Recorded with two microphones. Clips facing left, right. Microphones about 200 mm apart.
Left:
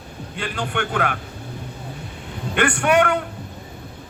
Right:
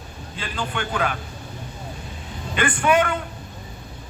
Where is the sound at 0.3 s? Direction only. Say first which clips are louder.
Left 3 dB; 65° left (ahead or behind).